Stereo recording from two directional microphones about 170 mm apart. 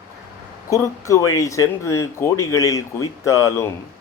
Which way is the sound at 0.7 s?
20° left (ahead or behind).